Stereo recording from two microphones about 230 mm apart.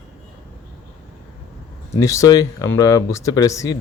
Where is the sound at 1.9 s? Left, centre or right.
Centre.